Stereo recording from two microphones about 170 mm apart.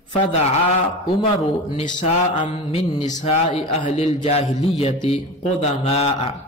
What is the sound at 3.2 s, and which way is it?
A man's voice, 35° left (ahead or behind).